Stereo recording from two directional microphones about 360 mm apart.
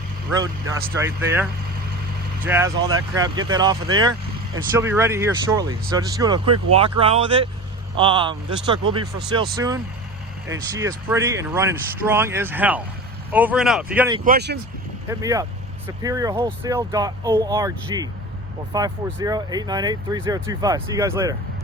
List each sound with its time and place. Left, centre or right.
0.7 s speech: centre
14.3 s speech: right
15.2 s speech: centre